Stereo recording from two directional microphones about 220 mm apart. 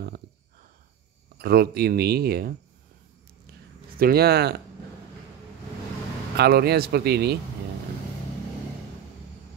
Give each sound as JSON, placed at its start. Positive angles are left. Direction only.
{"t": 0.0, "sound": "a sound", "side_deg": -45}
{"t": 1.4, "sound": "speech", "side_deg": -45}
{"t": 4.0, "sound": "speech", "side_deg": -45}
{"t": 6.3, "sound": "speech", "side_deg": -45}